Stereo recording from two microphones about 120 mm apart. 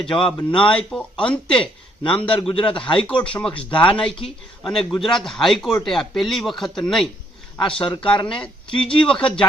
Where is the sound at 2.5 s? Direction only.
45° left (ahead or behind).